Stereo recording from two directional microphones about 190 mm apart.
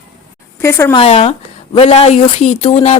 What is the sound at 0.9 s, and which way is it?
Speech, 30° left (ahead or behind).